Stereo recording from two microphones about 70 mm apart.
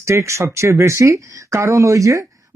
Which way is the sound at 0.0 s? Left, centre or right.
Right.